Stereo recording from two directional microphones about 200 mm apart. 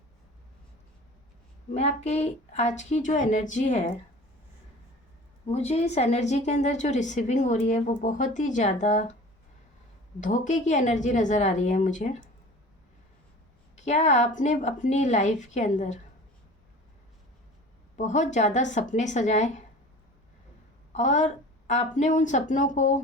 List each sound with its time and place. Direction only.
1.7 s a woman's voice: 35° left (ahead or behind)
5.5 s a woman's voice: 35° left (ahead or behind)
10.2 s a woman's voice: 40° left (ahead or behind)
13.7 s a woman's voice: 35° left (ahead or behind)
17.9 s a woman's voice: 35° left (ahead or behind)
20.9 s a woman's voice: 35° left (ahead or behind)